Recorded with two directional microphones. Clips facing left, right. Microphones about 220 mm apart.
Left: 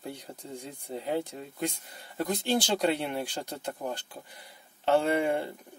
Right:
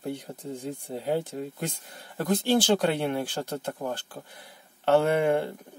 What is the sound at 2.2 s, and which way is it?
Speech, 55° right (ahead or behind).